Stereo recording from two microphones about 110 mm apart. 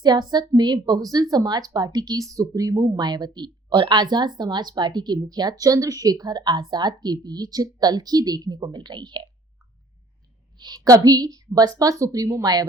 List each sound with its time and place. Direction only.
0.0 s a woman's voice: 40° right (ahead or behind)
10.6 s a woman's voice: 40° right (ahead or behind)